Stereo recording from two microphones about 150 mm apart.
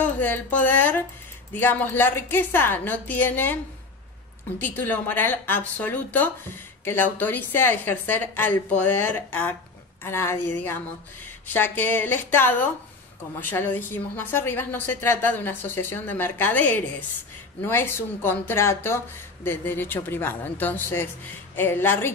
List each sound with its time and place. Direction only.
0.0 s a woman's voice: 10° left (ahead or behind)
4.6 s a woman's voice: 10° left (ahead or behind)